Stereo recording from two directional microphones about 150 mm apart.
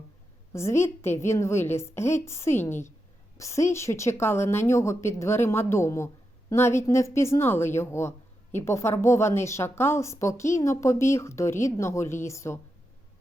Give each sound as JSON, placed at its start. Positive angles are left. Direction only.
{"t": 0.5, "sound": "a woman's voice", "side_deg": 20}